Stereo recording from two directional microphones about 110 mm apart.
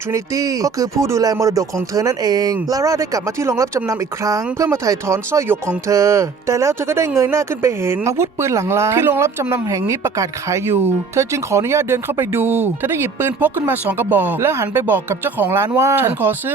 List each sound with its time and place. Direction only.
0.1 s speech: 30° right (ahead or behind)